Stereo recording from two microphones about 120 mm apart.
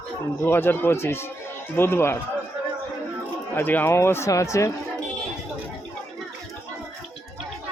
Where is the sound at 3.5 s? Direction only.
15° left (ahead or behind).